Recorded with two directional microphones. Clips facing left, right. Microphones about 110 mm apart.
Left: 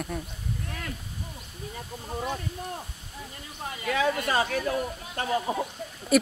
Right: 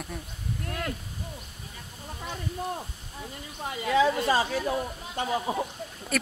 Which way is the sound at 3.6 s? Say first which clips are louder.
Right 3 dB; 20° right (ahead or behind).